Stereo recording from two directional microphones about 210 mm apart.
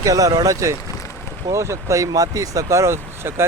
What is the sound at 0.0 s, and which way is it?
Speech, 15° right (ahead or behind).